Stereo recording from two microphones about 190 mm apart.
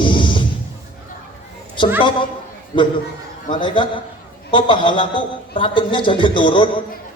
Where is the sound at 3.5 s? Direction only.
25° left (ahead or behind).